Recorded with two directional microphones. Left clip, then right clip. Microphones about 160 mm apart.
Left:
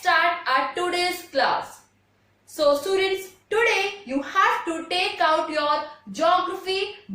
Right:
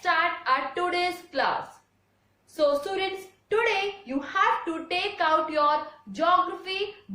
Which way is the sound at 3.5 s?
20° right (ahead or behind).